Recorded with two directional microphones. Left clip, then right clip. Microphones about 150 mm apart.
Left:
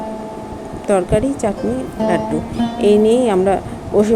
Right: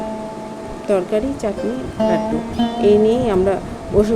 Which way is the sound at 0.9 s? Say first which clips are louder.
Left 3 dB; 35° left (ahead or behind).